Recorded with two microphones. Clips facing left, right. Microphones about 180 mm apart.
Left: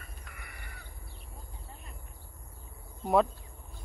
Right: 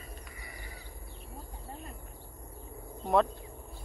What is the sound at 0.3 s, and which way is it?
Crow, 65° left (ahead or behind).